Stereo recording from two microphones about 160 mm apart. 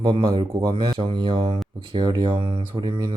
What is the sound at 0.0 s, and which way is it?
Speech, 30° right (ahead or behind).